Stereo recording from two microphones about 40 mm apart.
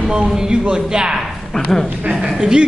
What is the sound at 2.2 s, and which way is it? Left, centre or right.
Speech, centre.